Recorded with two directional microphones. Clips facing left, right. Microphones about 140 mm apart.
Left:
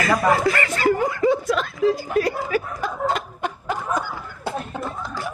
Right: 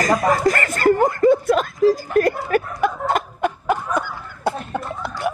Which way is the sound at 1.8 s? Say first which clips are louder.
Right 3 dB; 40° right (ahead or behind).